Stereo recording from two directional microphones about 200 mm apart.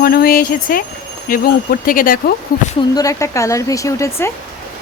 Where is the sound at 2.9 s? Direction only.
15° left (ahead or behind).